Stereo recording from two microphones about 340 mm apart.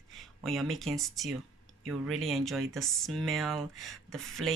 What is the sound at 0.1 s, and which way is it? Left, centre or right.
Speech, centre.